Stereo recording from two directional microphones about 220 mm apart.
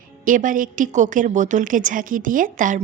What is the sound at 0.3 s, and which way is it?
A woman's voice, 35° right (ahead or behind).